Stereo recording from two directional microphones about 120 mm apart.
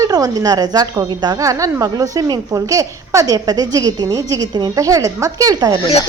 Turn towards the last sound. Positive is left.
turn(degrees=-30)  # may be behind; listen again after turning